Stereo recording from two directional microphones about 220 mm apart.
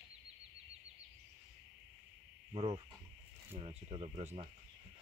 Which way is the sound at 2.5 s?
25° right (ahead or behind).